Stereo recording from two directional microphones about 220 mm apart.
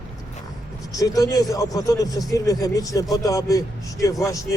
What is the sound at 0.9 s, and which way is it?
A man's voice, 15° left (ahead or behind).